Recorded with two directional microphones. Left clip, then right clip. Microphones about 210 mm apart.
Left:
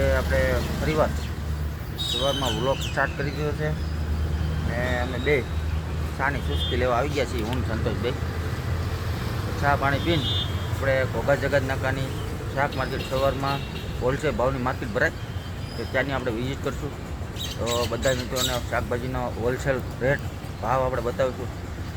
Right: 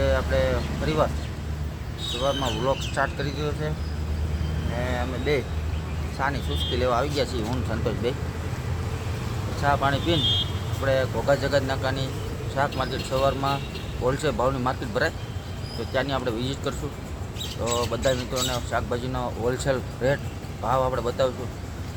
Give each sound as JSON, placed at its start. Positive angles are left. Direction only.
{"t": 0.0, "sound": "speech", "side_deg": -5}
{"t": 2.2, "sound": "speech", "side_deg": -5}
{"t": 4.8, "sound": "speech", "side_deg": -5}
{"t": 7.9, "sound": "speech", "side_deg": -15}
{"t": 9.6, "sound": "speech", "side_deg": -10}
{"t": 17.7, "sound": "speech", "side_deg": -10}